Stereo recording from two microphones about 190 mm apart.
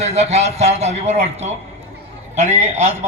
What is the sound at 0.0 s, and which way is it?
A man's voice, 35° right (ahead or behind).